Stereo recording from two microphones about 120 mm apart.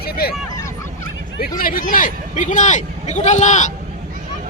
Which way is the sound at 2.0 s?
90° left.